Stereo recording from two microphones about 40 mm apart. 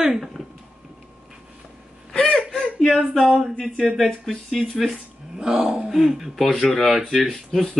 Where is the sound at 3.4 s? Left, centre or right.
Centre.